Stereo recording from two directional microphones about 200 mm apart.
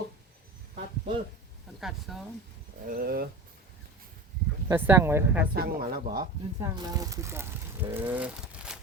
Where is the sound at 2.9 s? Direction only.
45° right (ahead or behind).